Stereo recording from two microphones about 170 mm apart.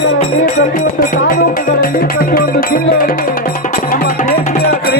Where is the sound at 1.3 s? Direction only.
55° left (ahead or behind).